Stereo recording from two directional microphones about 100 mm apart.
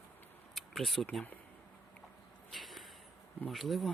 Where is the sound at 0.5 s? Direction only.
Centre (ahead or behind).